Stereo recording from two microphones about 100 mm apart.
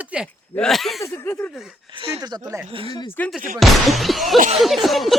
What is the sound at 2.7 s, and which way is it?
Speech, 70° right (ahead or behind).